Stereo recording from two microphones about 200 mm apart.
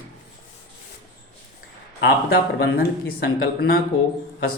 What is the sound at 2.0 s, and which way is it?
Speech, 50° left (ahead or behind).